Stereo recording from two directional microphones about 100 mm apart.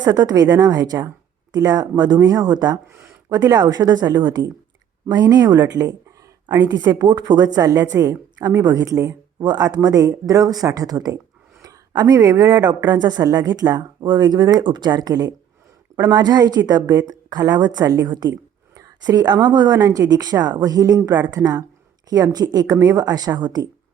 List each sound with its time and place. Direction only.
0.0 s speech: 40° right (ahead or behind)
7.7 s a woman's voice: 25° right (ahead or behind)
8.6 s a woman's voice: 35° right (ahead or behind)